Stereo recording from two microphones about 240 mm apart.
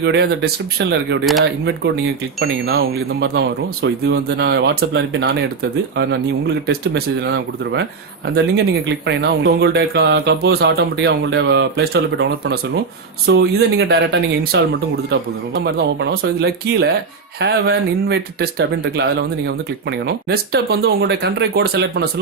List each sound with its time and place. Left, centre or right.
0.0 s a man's voice: right
1.2 s speech: centre
2.4 s a man's voice: right